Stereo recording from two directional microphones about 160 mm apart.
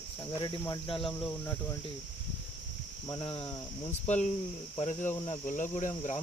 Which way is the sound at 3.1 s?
30° left (ahead or behind).